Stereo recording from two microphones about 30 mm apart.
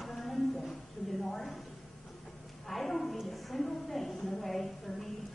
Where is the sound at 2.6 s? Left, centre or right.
Centre.